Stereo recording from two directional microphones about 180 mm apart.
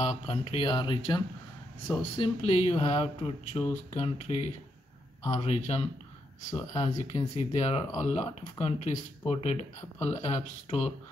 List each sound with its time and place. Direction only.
0.3 s speech: 30° left (ahead or behind)